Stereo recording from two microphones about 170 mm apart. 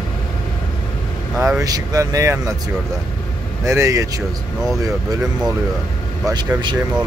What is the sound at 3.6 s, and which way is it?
Speech, 20° right (ahead or behind).